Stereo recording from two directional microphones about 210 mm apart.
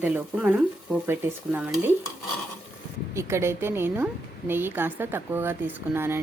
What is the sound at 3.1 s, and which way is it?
A woman's voice, 10° right (ahead or behind).